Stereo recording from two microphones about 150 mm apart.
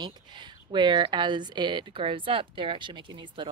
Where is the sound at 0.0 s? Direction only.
30° right (ahead or behind).